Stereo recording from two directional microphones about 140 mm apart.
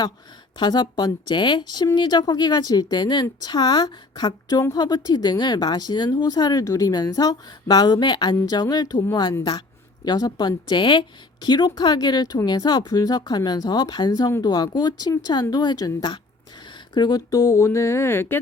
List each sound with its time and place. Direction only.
0.6 s a woman's voice: 30° left (ahead or behind)